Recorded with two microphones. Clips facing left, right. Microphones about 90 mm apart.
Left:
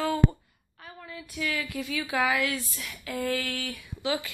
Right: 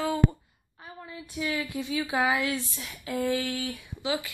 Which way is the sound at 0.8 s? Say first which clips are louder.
Even; 25° right (ahead or behind).